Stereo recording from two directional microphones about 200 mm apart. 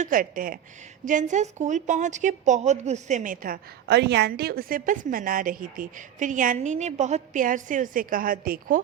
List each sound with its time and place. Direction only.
0.0 s a woman's voice: 45° right (ahead or behind)